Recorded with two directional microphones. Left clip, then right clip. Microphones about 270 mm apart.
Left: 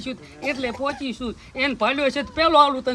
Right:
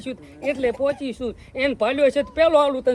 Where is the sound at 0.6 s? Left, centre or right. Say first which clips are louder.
Right 7 dB; left.